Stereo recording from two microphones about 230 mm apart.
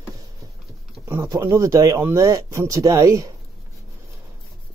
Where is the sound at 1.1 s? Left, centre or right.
Centre.